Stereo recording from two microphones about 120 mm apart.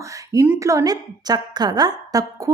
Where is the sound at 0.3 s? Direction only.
15° right (ahead or behind).